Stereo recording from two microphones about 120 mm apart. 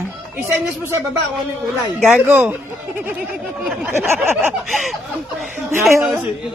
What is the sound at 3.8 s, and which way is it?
Speech, 15° right (ahead or behind).